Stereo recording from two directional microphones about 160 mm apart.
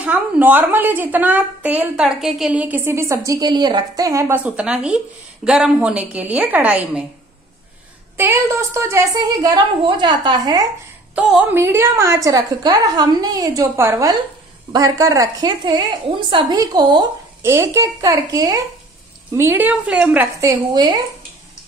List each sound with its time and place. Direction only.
0.0 s a woman's voice: 10° right (ahead or behind)
8.2 s a woman's voice: 15° right (ahead or behind)
11.1 s a woman's voice: 10° right (ahead or behind)
20.3 s a woman's voice: 20° right (ahead or behind)